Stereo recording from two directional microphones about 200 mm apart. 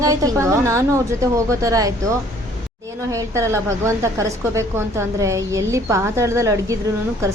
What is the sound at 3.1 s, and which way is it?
A woman's voice, 15° right (ahead or behind).